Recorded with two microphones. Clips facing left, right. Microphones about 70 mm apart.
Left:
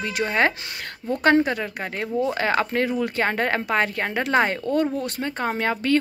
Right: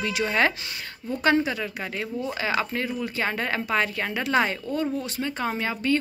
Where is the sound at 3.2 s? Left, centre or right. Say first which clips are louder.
Left 3 dB; left.